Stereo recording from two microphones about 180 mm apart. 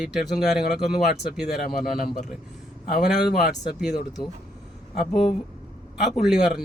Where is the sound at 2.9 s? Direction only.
60° left (ahead or behind).